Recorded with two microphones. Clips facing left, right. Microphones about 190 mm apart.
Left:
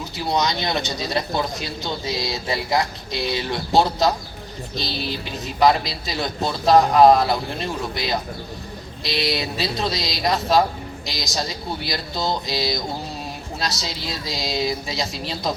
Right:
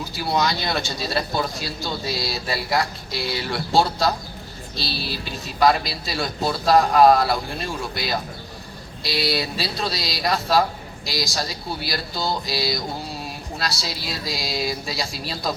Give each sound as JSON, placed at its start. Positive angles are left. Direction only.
{"t": 0.2, "sound": "speech", "side_deg": 20}